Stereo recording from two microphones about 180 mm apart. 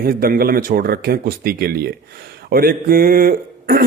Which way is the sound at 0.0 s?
55° right (ahead or behind).